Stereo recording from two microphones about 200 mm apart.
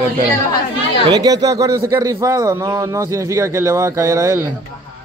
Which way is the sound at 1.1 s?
20° right (ahead or behind).